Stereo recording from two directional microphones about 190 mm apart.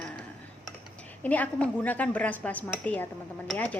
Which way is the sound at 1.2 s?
10° left (ahead or behind).